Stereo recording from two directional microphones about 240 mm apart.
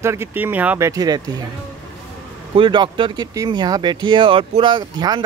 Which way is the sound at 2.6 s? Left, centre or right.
Centre.